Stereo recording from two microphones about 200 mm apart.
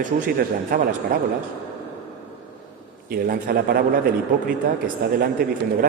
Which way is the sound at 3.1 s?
45° right (ahead or behind).